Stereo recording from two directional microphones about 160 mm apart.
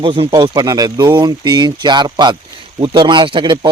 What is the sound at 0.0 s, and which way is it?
Speech, 30° right (ahead or behind).